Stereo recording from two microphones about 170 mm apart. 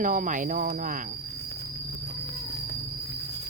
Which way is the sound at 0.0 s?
50° right (ahead or behind).